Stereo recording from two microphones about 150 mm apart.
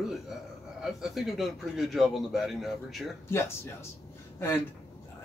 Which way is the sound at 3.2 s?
15° left (ahead or behind).